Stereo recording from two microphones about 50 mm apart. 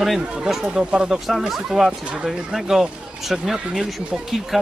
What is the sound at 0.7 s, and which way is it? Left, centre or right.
Speech, centre.